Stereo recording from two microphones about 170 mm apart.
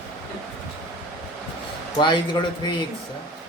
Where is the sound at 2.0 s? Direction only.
25° left (ahead or behind).